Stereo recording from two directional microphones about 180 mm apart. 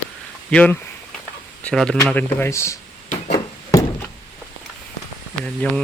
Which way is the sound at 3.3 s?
20° left (ahead or behind).